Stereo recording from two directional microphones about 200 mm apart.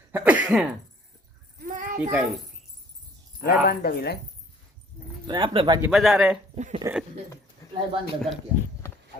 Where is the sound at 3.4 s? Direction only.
50° left (ahead or behind).